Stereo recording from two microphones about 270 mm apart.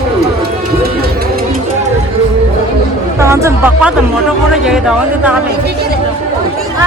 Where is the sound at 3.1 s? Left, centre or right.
Centre.